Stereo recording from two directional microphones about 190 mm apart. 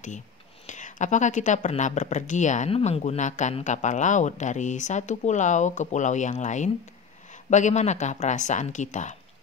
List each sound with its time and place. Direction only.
0.7 s speech: 40° left (ahead or behind)